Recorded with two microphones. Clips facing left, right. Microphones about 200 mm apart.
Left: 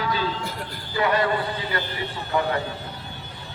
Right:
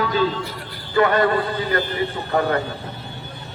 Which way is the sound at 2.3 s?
55° right (ahead or behind).